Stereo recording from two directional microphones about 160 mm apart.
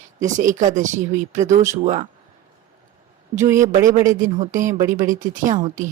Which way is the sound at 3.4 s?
20° right (ahead or behind).